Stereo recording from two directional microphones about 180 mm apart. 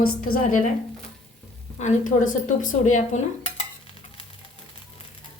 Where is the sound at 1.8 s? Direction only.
45° left (ahead or behind).